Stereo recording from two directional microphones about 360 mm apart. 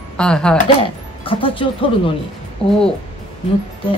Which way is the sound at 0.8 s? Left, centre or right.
Centre.